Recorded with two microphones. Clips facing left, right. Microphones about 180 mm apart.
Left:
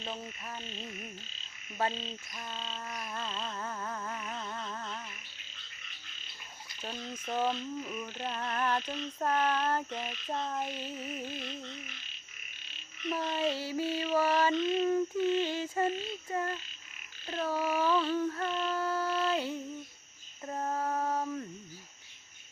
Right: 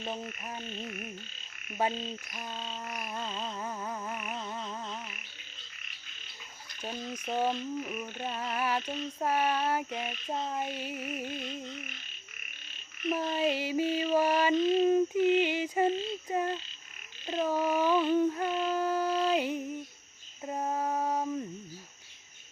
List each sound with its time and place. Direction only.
0.7 s frog: 60° right (ahead or behind)
1.8 s frog: 10° right (ahead or behind)
6.8 s frog: 15° right (ahead or behind)
13.1 s frog: 15° right (ahead or behind)
20.5 s female singing: 15° right (ahead or behind)